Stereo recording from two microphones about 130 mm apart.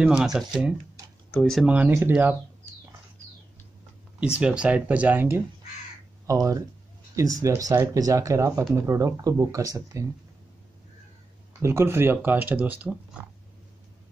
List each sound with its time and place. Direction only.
0.2 s speech: 5° right (ahead or behind)
1.7 s speech: 10° right (ahead or behind)
4.4 s speech: 5° right (ahead or behind)
6.2 s speech: 25° right (ahead or behind)
11.6 s speech: 20° right (ahead or behind)